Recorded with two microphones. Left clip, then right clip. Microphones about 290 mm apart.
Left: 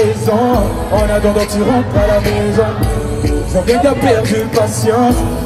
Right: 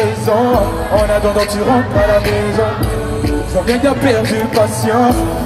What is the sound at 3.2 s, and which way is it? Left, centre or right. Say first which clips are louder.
Music: left 1 dB; right.